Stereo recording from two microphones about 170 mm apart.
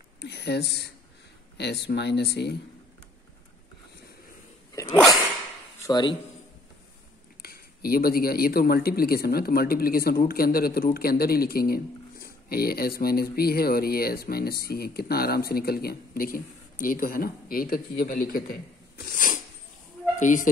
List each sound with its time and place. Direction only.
0.2 s speech: 75° left (ahead or behind)
5.8 s speech: 25° left (ahead or behind)
7.4 s speech: 65° left (ahead or behind); by 20.4 s 45° left (ahead or behind)